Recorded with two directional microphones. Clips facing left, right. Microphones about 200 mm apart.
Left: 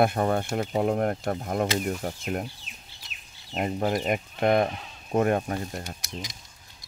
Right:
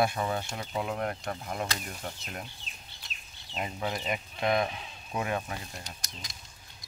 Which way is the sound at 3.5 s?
50° left (ahead or behind).